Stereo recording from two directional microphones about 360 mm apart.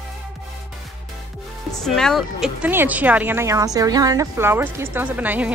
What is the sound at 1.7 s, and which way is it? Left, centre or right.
A woman's voice, centre.